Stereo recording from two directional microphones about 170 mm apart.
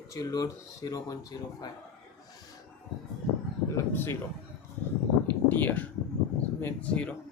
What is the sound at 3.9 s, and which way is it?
Speech, 15° left (ahead or behind).